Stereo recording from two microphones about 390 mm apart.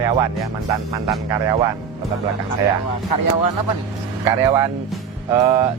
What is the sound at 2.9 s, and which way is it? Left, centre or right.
Speech, left.